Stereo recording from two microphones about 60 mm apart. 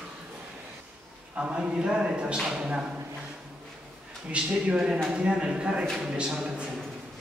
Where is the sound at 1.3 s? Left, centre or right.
Centre.